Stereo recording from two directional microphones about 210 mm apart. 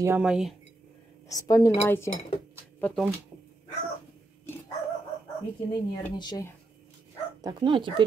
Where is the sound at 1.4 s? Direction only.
15° left (ahead or behind).